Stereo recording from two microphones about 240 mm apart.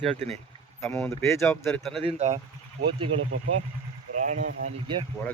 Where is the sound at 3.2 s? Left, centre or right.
Right.